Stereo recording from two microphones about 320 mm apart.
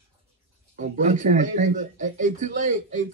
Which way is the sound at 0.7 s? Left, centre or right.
Right.